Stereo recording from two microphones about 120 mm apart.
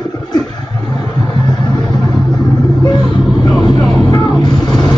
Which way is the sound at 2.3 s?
35° left (ahead or behind).